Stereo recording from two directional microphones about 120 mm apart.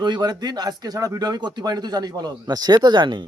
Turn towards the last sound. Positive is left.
turn(degrees=-40)  # may be behind; listen again after turning